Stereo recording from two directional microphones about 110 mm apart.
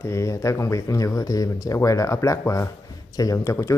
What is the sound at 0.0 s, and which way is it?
Speech, 25° left (ahead or behind).